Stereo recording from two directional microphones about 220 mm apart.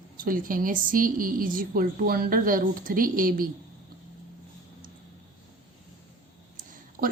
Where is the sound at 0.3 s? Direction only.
40° right (ahead or behind).